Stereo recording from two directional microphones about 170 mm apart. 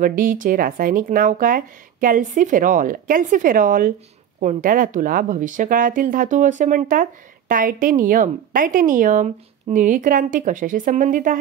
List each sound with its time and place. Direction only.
0.0 s speech: 55° right (ahead or behind)